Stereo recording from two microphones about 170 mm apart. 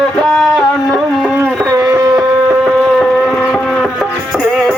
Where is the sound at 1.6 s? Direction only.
15° right (ahead or behind).